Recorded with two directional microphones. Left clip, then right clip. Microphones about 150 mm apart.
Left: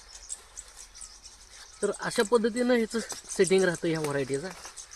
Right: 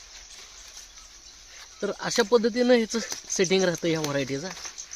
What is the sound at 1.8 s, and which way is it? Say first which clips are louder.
Speech: right 2 dB; 60° right (ahead or behind).